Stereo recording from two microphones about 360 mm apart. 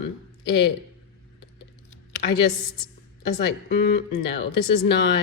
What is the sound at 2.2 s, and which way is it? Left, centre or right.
Speech, left.